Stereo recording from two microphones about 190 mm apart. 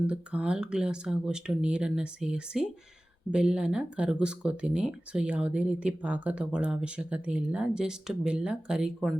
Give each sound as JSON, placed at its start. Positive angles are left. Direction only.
{"t": 0.1, "sound": "speech", "side_deg": -5}